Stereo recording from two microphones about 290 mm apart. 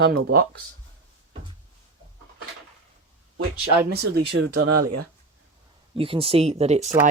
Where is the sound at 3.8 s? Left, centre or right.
Right.